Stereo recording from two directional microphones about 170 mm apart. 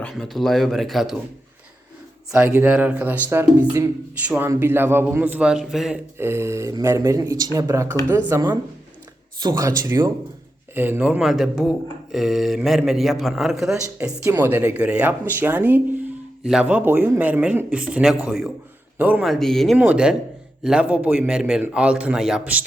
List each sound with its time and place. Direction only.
0.0 s a man's voice: centre (ahead or behind)
2.3 s speech: 10° right (ahead or behind)
6.1 s a man's voice: 15° right (ahead or behind)
19.3 s a man's voice: centre (ahead or behind)